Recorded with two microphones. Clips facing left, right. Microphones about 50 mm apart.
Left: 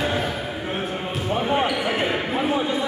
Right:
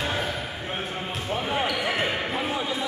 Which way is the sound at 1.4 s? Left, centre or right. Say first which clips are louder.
Left 5 dB; centre.